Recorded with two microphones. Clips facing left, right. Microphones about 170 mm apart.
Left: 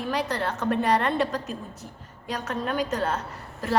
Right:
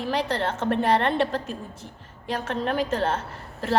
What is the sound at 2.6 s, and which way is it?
Speech, 30° right (ahead or behind).